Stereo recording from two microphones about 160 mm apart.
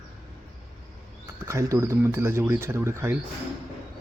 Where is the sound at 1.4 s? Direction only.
20° right (ahead or behind).